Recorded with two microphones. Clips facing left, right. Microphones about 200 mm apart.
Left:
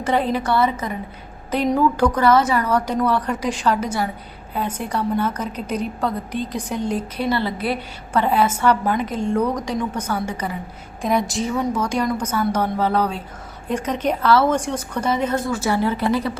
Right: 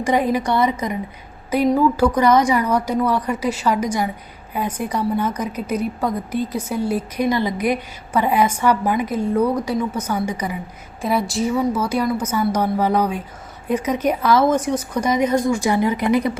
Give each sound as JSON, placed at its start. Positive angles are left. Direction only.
{"t": 0.0, "sound": "a woman's voice", "side_deg": -10}